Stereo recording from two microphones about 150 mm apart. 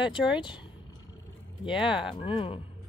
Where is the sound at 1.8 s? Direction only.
35° left (ahead or behind).